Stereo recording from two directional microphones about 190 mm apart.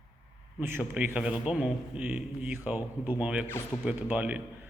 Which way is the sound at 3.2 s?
5° right (ahead or behind).